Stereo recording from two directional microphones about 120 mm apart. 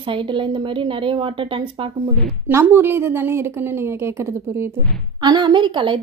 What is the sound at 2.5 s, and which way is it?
A woman's voice, 20° right (ahead or behind).